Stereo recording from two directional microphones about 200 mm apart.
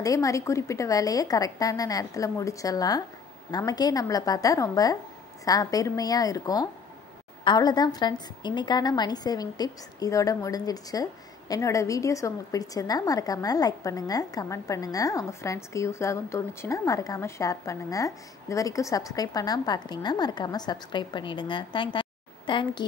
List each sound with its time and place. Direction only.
0.0 s a woman's voice: 15° left (ahead or behind)